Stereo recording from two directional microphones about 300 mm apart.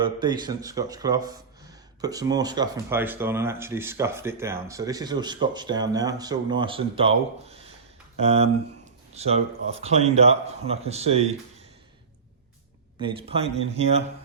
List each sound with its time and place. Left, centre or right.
0.0 s speech: centre
8.2 s a man's voice: right
13.0 s a man's voice: centre